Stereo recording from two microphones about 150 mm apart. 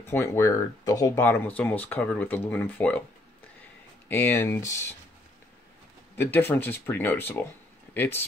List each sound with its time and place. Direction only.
0.1 s speech: 20° left (ahead or behind)
4.1 s speech: 15° left (ahead or behind)
6.1 s speech: 15° left (ahead or behind)